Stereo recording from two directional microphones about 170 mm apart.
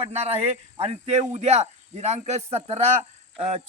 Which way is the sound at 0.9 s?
40° right (ahead or behind).